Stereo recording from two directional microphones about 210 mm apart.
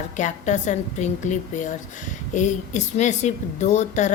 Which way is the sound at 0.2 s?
35° left (ahead or behind).